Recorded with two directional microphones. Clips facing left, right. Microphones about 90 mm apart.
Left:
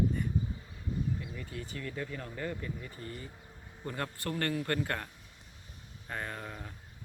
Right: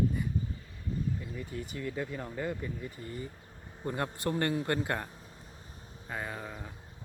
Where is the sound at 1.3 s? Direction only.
20° right (ahead or behind).